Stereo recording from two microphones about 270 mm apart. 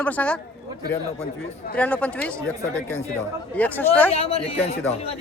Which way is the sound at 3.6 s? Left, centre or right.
Centre.